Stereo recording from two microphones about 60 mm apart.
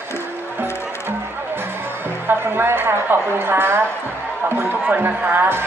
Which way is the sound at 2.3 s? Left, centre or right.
Right.